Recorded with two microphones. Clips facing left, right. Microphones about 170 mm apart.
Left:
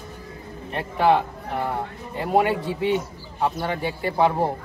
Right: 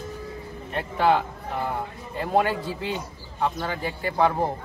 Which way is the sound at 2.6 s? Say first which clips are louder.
Left 7 dB; 70° left (ahead or behind).